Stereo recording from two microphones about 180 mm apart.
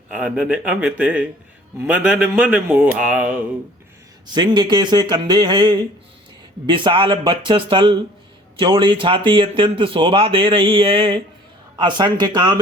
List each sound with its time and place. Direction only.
0.1 s a man's voice: 5° right (ahead or behind)
4.4 s speech: 25° right (ahead or behind)